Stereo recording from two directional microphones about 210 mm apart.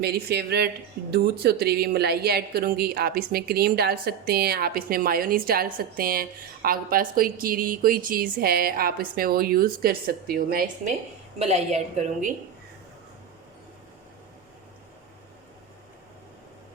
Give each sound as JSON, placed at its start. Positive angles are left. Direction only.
{"t": 0.0, "sound": "a woman's voice", "side_deg": -50}
{"t": 11.3, "sound": "a woman's voice", "side_deg": -30}